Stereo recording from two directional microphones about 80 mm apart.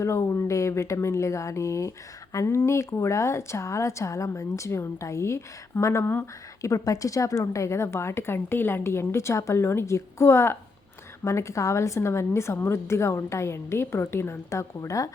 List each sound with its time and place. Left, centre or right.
0.0 s a woman's voice: left